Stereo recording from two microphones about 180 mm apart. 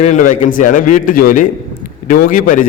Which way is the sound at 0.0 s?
45° left (ahead or behind).